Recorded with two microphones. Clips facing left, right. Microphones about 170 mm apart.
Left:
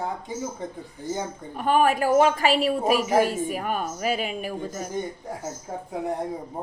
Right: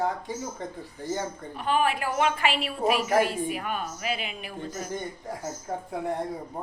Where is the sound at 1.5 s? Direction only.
45° left (ahead or behind).